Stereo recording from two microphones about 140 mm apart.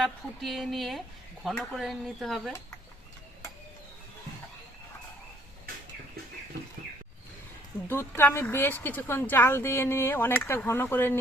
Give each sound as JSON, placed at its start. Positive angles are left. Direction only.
{"t": 0.0, "sound": "speech", "side_deg": 0}
{"t": 7.9, "sound": "a woman's voice", "side_deg": 15}